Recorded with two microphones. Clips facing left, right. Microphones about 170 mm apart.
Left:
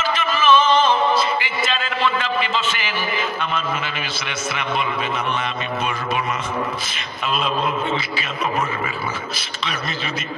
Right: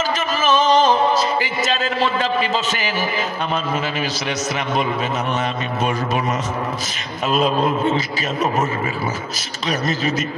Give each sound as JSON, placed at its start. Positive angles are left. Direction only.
{"t": 0.0, "sound": "music", "side_deg": -40}
{"t": 7.3, "sound": "a man's voice", "side_deg": -40}
{"t": 9.7, "sound": "a man's voice", "side_deg": -40}